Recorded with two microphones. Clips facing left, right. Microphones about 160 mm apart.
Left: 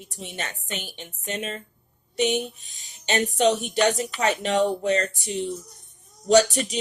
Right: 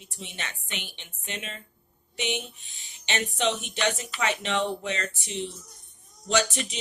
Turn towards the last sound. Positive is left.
turn(degrees=40)  # may be behind; listen again after turning